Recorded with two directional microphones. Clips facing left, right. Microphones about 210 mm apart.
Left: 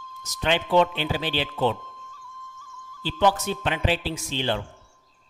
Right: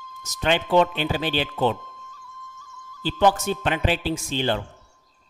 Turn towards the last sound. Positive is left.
turn(degrees=-45)  # may be behind; listen again after turning